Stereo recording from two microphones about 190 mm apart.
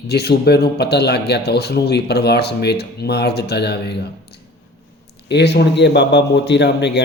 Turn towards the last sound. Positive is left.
turn(degrees=65)  # may be behind; listen again after turning